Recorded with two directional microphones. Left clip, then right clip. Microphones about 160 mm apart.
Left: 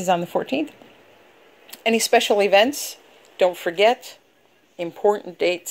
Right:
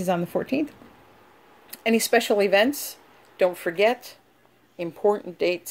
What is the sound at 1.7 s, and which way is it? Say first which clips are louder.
Speech: left 3 dB; 5° left (ahead or behind).